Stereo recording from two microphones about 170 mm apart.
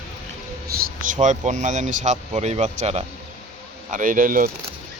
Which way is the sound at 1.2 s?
45° right (ahead or behind).